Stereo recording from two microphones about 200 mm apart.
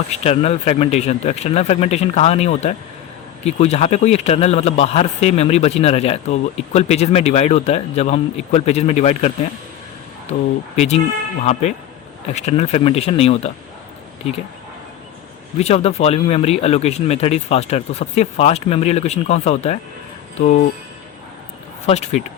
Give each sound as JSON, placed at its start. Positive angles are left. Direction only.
{"t": 0.1, "sound": "speech", "side_deg": 30}
{"t": 12.3, "sound": "speech", "side_deg": 35}
{"t": 15.6, "sound": "speech", "side_deg": 30}
{"t": 21.8, "sound": "speech", "side_deg": 30}